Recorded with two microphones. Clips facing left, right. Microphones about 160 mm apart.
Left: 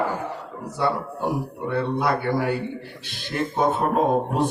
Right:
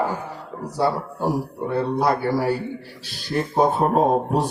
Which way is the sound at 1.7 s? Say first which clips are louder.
Right 2 dB; 35° right (ahead or behind).